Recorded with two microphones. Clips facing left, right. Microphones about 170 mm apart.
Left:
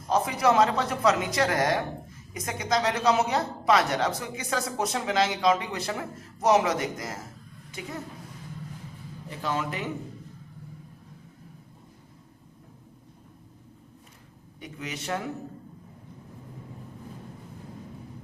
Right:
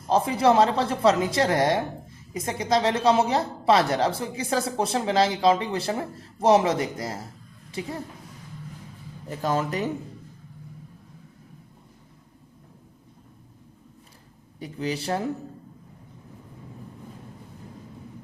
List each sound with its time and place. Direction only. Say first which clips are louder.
0.1 s a man's voice: right 3 dB; 30° right (ahead or behind)
9.4 s a woman's voice: right 5 dB; 40° right (ahead or behind)
14.6 s a woman's voice: right 8 dB; 35° right (ahead or behind)